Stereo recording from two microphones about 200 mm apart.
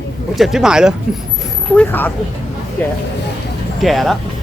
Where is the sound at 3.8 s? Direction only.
Centre (ahead or behind).